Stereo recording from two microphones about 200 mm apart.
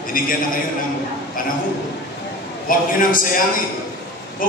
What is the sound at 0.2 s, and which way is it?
Speech, 45° left (ahead or behind).